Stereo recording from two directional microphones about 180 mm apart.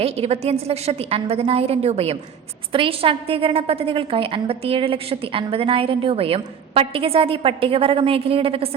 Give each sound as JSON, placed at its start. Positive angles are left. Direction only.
{"t": 0.0, "sound": "a woman's voice", "side_deg": -35}